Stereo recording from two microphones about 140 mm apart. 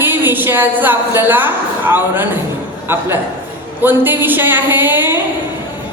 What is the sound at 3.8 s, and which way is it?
A woman's voice, 15° right (ahead or behind).